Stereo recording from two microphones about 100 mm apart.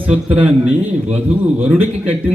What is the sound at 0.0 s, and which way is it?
A man's voice, 15° right (ahead or behind).